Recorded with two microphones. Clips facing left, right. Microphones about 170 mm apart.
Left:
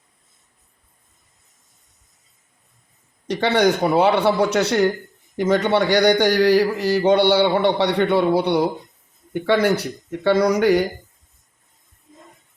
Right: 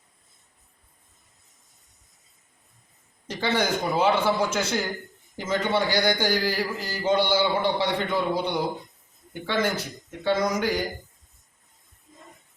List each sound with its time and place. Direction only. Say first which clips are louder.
3.2 s a man's voice: left 8 dB; 70° left (ahead or behind)